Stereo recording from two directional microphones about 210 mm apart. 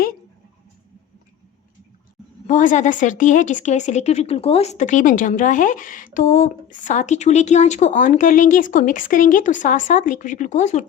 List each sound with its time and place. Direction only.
2.5 s speech: 35° left (ahead or behind)